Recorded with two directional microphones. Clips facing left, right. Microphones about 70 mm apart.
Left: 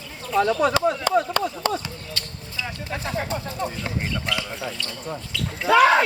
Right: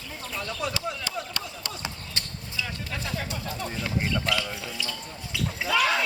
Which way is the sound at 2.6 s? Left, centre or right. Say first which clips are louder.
Left 3 dB; left.